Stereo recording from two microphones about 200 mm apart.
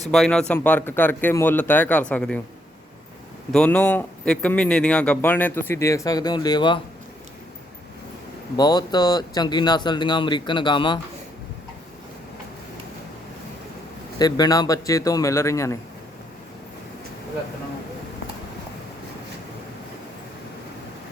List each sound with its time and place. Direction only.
0.0 s speech: centre (ahead or behind)
3.5 s speech: 5° left (ahead or behind); by 6.7 s 20° left (ahead or behind)
8.5 s speech: 20° left (ahead or behind)
14.2 s speech: 20° left (ahead or behind)